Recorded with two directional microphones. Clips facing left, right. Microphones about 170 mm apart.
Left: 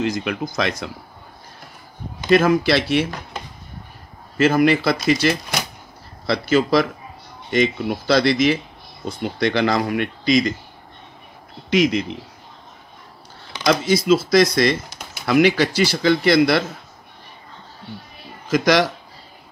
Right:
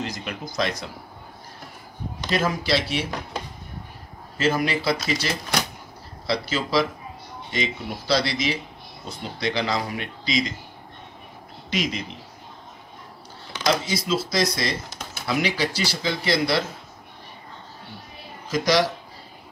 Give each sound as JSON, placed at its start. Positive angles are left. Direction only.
{"t": 0.2, "sound": "speech", "side_deg": 65}
{"t": 2.3, "sound": "speech", "side_deg": 60}
{"t": 4.4, "sound": "speech", "side_deg": 60}
{"t": 11.7, "sound": "speech", "side_deg": 60}
{"t": 13.7, "sound": "speech", "side_deg": 55}
{"t": 18.5, "sound": "speech", "side_deg": 60}